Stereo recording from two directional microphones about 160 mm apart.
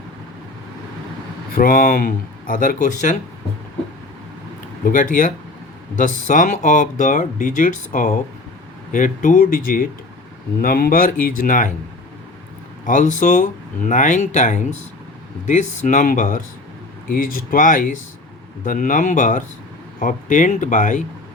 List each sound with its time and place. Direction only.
1.5 s speech: 60° left (ahead or behind)
4.9 s speech: 55° left (ahead or behind)
12.8 s speech: 50° left (ahead or behind)